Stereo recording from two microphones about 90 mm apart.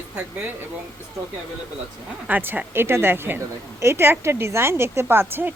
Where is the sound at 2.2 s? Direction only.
15° right (ahead or behind).